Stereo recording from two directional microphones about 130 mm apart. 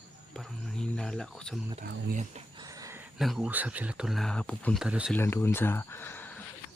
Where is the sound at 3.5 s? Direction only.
10° right (ahead or behind); by 4.7 s 10° left (ahead or behind).